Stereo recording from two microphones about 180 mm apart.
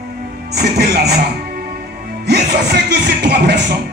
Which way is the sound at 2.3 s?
65° right (ahead or behind).